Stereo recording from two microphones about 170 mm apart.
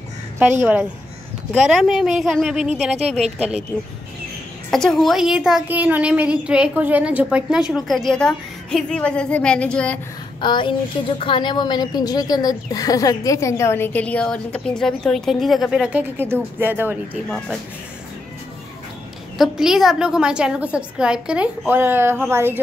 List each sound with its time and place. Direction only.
0.7 s a woman's voice: 5° right (ahead or behind)
3.0 s a woman's voice: 40° right (ahead or behind)
4.6 s a woman's voice: centre (ahead or behind)
10.4 s a woman's voice: 25° left (ahead or behind); by 17.2 s 10° right (ahead or behind)
19.3 s a woman's voice: centre (ahead or behind)